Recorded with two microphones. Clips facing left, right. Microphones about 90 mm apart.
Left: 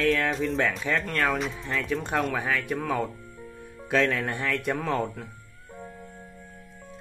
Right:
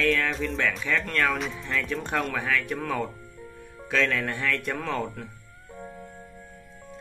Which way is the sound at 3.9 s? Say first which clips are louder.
Left 1 dB; 15° left (ahead or behind).